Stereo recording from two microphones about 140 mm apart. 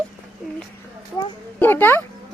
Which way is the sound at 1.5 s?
15° left (ahead or behind).